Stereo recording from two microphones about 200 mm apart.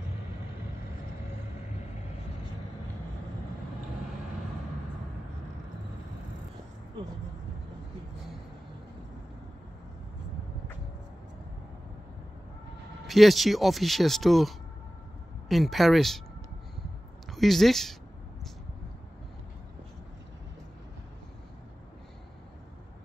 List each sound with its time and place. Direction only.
7.0 s speech: 25° right (ahead or behind)
13.0 s speech: centre (ahead or behind)
17.3 s speech: centre (ahead or behind)